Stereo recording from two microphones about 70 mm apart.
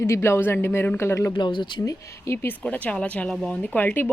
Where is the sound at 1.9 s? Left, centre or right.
Left.